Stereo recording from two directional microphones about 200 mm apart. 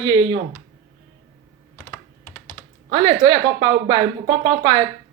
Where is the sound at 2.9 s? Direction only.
20° right (ahead or behind).